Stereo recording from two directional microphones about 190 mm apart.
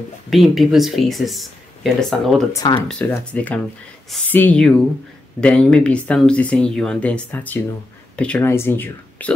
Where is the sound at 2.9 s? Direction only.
5° left (ahead or behind).